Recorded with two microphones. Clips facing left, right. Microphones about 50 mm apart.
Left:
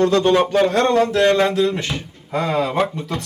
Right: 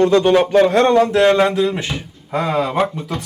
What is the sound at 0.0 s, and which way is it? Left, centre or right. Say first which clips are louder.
Speech: right 2 dB; centre.